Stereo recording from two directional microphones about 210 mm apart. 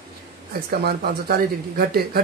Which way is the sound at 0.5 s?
45° right (ahead or behind).